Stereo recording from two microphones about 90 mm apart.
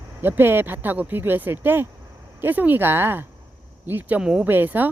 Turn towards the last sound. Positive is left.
turn(degrees=-20)  # may be behind; listen again after turning